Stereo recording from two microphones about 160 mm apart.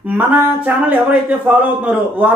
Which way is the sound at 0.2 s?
10° right (ahead or behind).